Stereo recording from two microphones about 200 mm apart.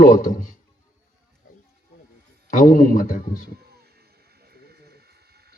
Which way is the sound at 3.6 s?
50° right (ahead or behind).